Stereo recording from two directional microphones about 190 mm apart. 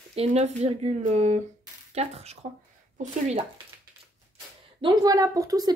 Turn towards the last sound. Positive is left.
turn(degrees=-20)  # may be behind; listen again after turning